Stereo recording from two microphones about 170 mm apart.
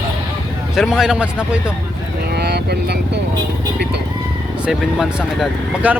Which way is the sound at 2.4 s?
75° right (ahead or behind).